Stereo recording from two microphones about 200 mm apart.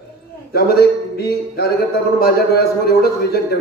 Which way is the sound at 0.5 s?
50° left (ahead or behind).